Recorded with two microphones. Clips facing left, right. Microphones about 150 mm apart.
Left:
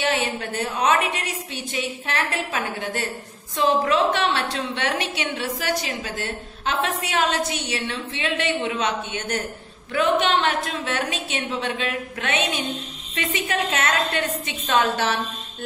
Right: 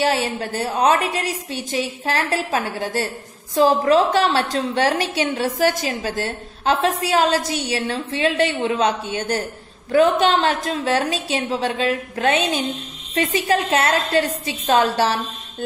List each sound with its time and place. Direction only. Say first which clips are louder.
0.0 s a woman's voice: right 4 dB; 40° right (ahead or behind)